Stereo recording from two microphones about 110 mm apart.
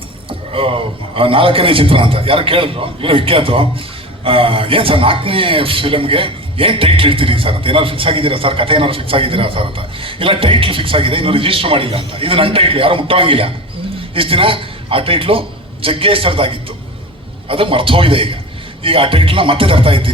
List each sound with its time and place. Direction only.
0.3 s a man's voice: 55° right (ahead or behind)